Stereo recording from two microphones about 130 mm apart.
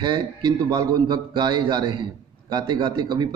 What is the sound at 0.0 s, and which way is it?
A man's voice, 35° right (ahead or behind).